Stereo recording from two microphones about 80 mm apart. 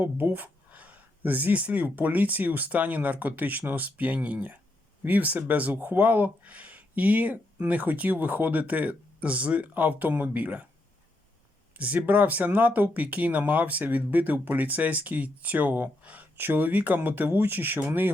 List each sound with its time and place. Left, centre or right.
0.0 s speech: right
11.8 s speech: centre